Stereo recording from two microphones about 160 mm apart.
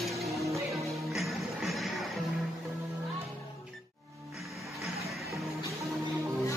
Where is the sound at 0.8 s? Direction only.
Centre (ahead or behind).